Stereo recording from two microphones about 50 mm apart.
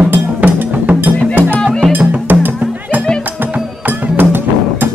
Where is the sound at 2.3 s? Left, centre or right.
Right.